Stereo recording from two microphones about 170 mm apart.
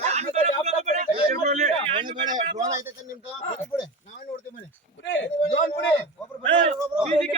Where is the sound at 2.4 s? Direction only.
45° right (ahead or behind).